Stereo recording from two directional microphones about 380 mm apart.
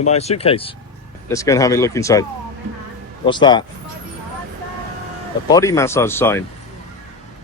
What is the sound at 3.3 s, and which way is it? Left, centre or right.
Speech, centre.